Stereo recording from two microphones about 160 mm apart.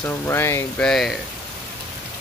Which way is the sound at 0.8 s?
Centre (ahead or behind).